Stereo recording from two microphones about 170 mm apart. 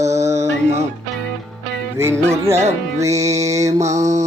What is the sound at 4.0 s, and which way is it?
Music, 40° right (ahead or behind).